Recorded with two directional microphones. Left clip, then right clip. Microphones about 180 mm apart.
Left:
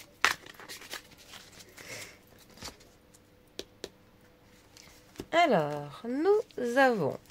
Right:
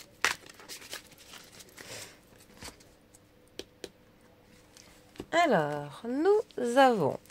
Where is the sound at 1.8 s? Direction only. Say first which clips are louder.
Left 2 dB; 10° right (ahead or behind).